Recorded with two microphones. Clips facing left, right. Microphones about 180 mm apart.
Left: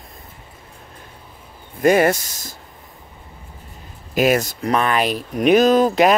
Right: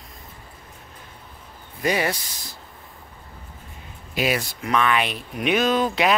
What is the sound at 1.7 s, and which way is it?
Speech, 50° left (ahead or behind).